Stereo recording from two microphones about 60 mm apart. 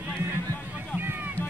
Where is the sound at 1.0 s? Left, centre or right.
Right.